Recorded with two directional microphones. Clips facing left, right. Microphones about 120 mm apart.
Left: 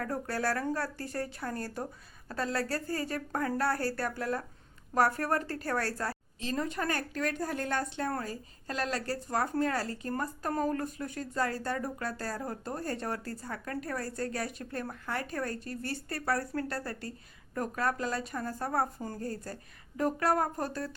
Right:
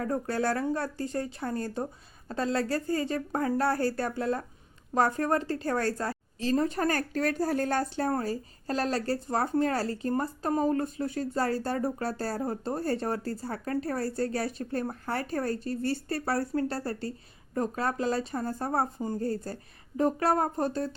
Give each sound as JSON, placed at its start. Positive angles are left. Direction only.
{"t": 0.0, "sound": "speech", "side_deg": -25}
{"t": 6.4, "sound": "speech", "side_deg": -35}